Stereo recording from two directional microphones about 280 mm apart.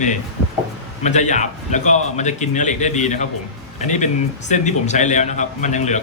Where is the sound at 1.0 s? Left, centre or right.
Left.